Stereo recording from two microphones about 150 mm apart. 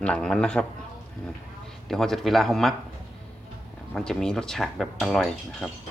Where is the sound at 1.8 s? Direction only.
Centre (ahead or behind).